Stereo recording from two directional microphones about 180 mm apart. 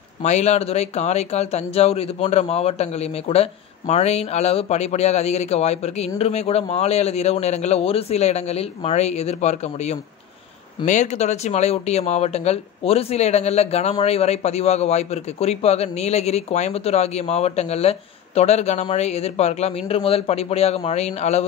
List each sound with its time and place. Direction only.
0.2 s speech: 40° left (ahead or behind)